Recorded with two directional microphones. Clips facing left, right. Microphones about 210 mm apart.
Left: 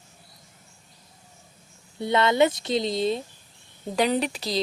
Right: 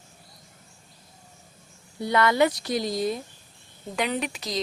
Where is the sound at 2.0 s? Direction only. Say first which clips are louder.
Left 1 dB; 25° left (ahead or behind).